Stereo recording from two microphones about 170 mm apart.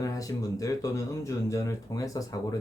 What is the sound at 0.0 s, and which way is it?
Speech, 20° left (ahead or behind).